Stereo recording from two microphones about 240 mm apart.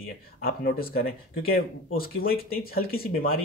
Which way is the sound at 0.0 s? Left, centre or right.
Left.